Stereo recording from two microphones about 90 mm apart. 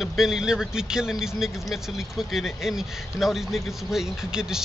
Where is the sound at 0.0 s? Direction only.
5° right (ahead or behind).